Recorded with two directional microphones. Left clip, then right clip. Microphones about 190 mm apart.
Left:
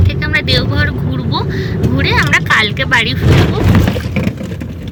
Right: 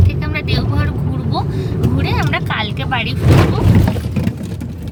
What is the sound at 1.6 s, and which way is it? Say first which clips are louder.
Speech: left 4 dB; 5° right (ahead or behind).